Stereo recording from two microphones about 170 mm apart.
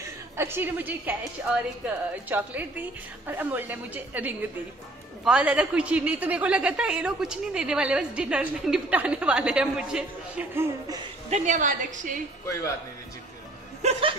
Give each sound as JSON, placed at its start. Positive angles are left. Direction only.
{"t": 0.4, "sound": "speech", "side_deg": -15}
{"t": 11.2, "sound": "a woman's voice", "side_deg": -45}